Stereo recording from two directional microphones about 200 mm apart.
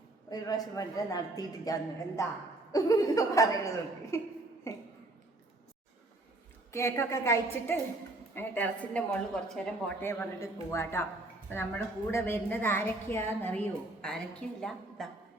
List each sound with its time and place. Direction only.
0.3 s a woman's voice: 20° left (ahead or behind)
6.7 s a woman's voice: 15° left (ahead or behind)